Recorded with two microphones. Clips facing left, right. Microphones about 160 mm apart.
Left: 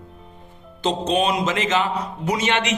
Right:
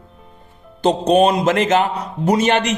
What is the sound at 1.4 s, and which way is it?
A man's voice, 55° right (ahead or behind).